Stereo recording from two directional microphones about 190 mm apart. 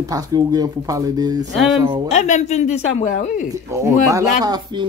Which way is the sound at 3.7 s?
15° right (ahead or behind).